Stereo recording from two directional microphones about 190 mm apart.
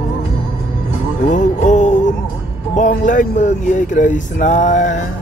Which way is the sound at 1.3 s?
40° left (ahead or behind).